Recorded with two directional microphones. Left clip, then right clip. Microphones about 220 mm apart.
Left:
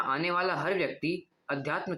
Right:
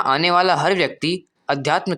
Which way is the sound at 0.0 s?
50° right (ahead or behind).